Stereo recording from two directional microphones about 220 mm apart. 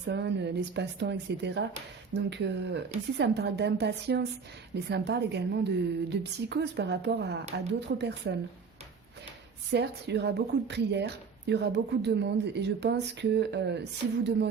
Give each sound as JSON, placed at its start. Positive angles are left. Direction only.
{"t": 0.1, "sound": "a woman's voice", "side_deg": -50}
{"t": 9.7, "sound": "a woman's voice", "side_deg": -50}